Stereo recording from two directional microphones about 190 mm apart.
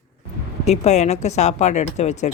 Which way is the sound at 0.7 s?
35° left (ahead or behind).